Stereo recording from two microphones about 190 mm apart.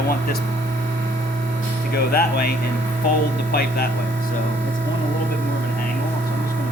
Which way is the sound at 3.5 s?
55° left (ahead or behind).